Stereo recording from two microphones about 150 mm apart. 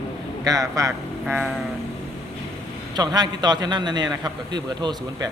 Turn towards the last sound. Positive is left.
turn(degrees=-30)  # may be behind; listen again after turning